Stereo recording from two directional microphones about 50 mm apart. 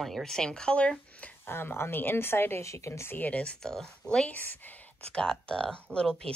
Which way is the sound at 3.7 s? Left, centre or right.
Centre.